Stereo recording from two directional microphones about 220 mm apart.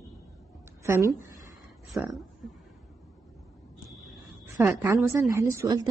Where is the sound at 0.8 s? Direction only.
10° right (ahead or behind).